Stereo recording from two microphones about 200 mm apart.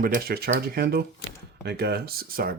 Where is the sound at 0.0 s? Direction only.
50° right (ahead or behind).